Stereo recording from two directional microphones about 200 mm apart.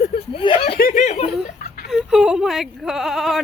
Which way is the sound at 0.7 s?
45° left (ahead or behind).